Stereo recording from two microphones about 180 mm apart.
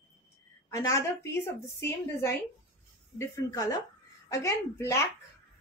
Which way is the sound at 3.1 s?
15° left (ahead or behind).